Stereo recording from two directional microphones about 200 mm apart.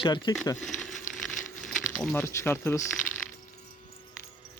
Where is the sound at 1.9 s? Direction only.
5° left (ahead or behind).